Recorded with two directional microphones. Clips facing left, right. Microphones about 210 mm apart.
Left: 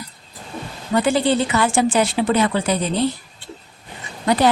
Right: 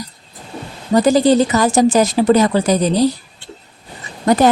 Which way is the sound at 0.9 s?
40° right (ahead or behind).